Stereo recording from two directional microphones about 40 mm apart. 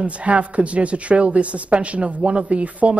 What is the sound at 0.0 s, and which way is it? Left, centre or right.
Speech, right.